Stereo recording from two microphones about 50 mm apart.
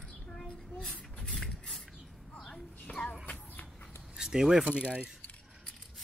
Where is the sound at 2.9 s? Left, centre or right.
Left.